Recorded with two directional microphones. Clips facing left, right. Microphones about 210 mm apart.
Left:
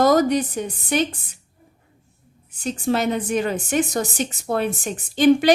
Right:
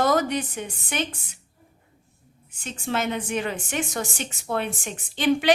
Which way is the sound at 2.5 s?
40° left (ahead or behind).